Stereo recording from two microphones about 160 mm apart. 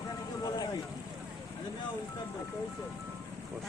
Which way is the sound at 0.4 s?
25° left (ahead or behind).